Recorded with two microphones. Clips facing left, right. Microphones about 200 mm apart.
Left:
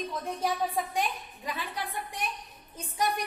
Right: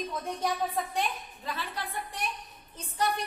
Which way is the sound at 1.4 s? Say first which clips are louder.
Left 1 dB; 15° left (ahead or behind).